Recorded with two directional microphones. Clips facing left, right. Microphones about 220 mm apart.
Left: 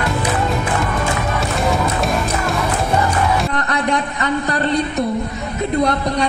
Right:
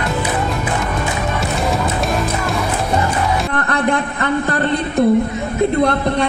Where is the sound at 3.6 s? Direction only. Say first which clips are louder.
Right 2 dB; 55° right (ahead or behind).